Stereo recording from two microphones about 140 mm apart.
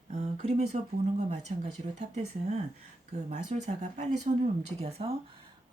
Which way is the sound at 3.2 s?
50° right (ahead or behind).